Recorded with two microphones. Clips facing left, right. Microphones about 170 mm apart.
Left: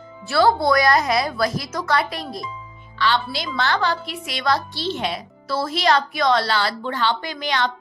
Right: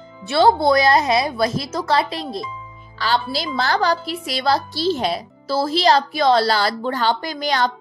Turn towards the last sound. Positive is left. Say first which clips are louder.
# right 3 dB
turn(degrees=-40)  # may be behind; listen again after turning